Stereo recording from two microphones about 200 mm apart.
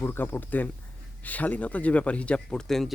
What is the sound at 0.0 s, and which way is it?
Speech, 10° left (ahead or behind).